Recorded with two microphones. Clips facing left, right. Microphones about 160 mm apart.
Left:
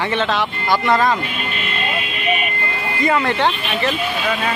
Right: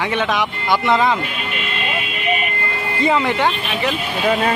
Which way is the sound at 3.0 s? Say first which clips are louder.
Even; 20° right (ahead or behind).